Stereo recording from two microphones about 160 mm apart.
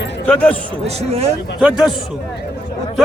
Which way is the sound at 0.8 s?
40° right (ahead or behind).